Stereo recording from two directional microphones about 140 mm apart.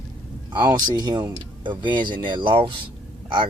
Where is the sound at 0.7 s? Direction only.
30° right (ahead or behind).